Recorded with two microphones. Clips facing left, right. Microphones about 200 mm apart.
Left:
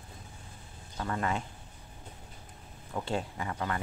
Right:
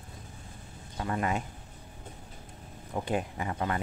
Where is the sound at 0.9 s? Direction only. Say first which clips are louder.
Right 2 dB; 15° right (ahead or behind).